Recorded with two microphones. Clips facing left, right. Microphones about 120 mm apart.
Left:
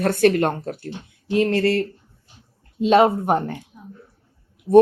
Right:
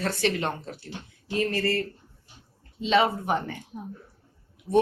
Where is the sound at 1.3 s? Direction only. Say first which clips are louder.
Left 7 dB; 70° left (ahead or behind).